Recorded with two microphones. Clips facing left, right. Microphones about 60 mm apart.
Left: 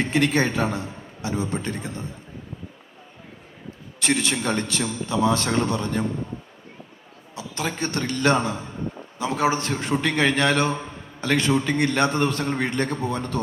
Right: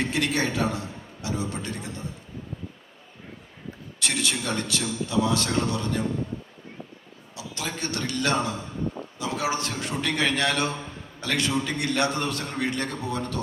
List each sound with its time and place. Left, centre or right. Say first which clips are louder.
0.0 s a man's voice: left 4 dB; left
4.0 s a man's voice: left 5 dB; left
7.3 s a man's voice: left 5 dB; left